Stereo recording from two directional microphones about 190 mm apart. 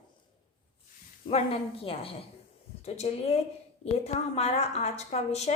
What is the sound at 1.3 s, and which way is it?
A woman's voice, 30° left (ahead or behind).